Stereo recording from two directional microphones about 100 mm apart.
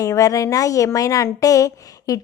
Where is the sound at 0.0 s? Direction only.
35° left (ahead or behind).